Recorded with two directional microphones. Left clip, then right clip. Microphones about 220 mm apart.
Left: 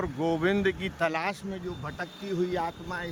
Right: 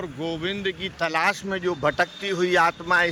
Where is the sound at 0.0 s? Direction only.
20° left (ahead or behind).